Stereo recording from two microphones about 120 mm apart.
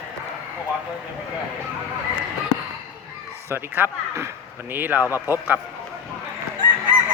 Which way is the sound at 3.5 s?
20° right (ahead or behind).